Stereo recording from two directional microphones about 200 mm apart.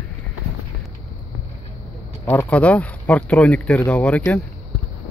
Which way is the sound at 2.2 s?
10° left (ahead or behind).